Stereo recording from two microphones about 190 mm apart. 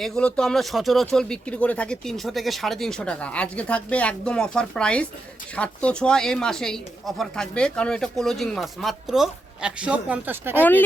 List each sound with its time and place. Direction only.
0.0 s speech: 5° left (ahead or behind)
10.6 s speech: 10° left (ahead or behind)